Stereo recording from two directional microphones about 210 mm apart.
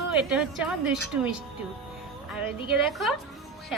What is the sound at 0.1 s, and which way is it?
A woman's voice, 5° right (ahead or behind).